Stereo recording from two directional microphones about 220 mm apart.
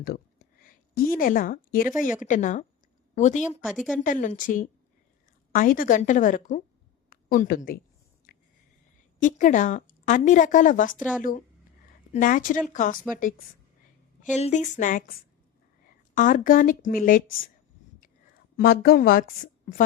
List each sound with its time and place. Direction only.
0.0 s a sound: 40° left (ahead or behind)
2.2 s a woman's voice: 35° left (ahead or behind)
3.7 s a woman's voice: centre (ahead or behind)
4.0 s a woman's voice: 35° left (ahead or behind)
8.3 s a sound: 40° left (ahead or behind)
9.2 s a woman's voice: 35° left (ahead or behind)
14.3 s a woman's voice: 30° left (ahead or behind)
16.1 s a woman's voice: 35° left (ahead or behind)
18.5 s a woman's voice: 45° left (ahead or behind)